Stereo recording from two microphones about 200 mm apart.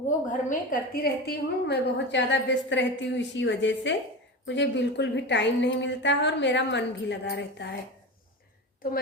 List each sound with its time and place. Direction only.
0.3 s a woman's voice: 40° left (ahead or behind); by 7.8 s 55° left (ahead or behind)